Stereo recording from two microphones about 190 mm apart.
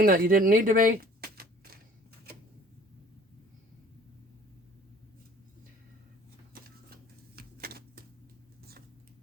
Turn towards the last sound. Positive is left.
turn(degrees=-55)  # may be behind; listen again after turning